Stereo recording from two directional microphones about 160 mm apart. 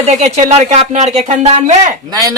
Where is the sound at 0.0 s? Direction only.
45° right (ahead or behind).